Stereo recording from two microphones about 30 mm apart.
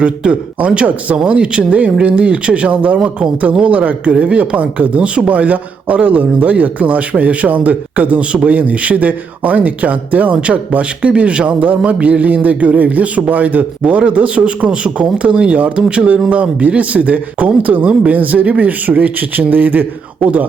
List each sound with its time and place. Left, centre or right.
0.0 s a man's voice: right
11.2 s speech: right
11.4 s a man's voice: right
12.2 s speech: right
14.1 s a man's voice: right
20.1 s speech: right